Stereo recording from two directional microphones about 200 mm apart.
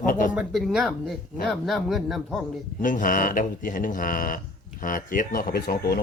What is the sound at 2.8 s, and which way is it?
Speech, 40° left (ahead or behind).